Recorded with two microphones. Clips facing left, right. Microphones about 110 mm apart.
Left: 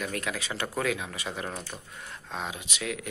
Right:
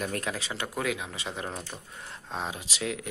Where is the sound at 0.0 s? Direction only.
35° right (ahead or behind).